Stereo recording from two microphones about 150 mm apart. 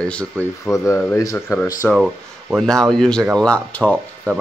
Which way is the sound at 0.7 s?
20° left (ahead or behind).